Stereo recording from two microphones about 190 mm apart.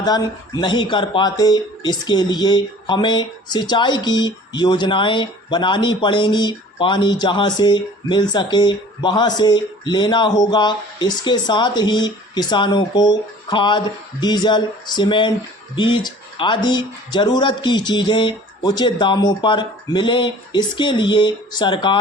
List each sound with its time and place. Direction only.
0.0 s speech: 20° left (ahead or behind)